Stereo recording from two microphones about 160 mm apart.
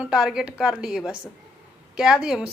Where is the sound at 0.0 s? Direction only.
5° right (ahead or behind).